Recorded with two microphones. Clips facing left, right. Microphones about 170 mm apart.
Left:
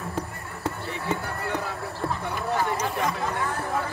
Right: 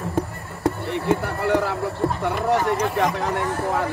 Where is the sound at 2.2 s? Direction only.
80° right.